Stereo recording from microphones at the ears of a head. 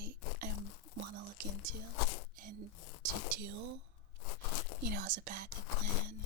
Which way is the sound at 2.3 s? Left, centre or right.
Right.